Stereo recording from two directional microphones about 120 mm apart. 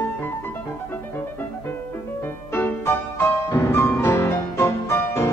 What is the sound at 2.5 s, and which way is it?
Music, 20° left (ahead or behind).